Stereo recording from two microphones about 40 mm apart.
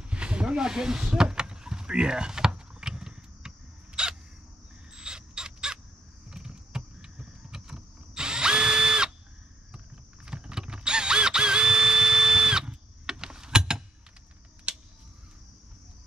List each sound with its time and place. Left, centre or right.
0.0 s a sound: right
6.3 s power windows: centre
10.2 s mechanisms: right